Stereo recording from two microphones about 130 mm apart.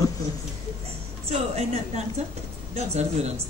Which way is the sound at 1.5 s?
55° right (ahead or behind).